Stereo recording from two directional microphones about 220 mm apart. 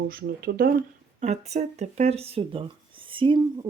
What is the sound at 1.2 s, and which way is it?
Speech, 30° right (ahead or behind).